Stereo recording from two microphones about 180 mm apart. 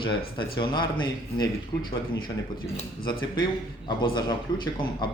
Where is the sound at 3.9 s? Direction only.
25° left (ahead or behind).